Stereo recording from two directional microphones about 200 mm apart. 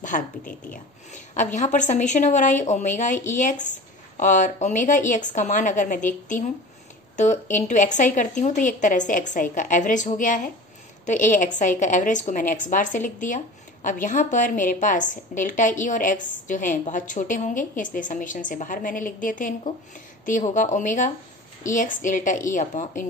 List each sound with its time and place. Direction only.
0.0 s a woman's voice: 40° left (ahead or behind)